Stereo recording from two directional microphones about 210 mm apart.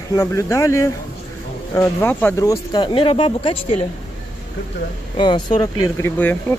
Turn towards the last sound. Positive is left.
turn(degrees=10)  # may be behind; listen again after turning